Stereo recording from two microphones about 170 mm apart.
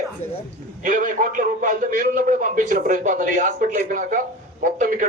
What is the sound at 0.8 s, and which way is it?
A man's voice, 50° right (ahead or behind).